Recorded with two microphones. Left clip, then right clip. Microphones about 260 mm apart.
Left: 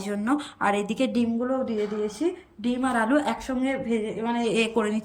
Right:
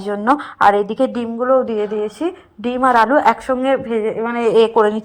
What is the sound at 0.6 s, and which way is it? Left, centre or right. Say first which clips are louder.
Speech: right 13 dB; right.